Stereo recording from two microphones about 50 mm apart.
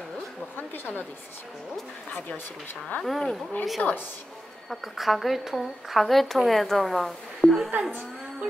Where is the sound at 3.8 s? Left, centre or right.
Left.